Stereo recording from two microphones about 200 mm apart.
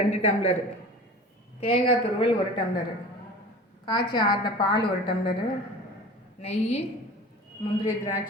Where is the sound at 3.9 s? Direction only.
20° left (ahead or behind).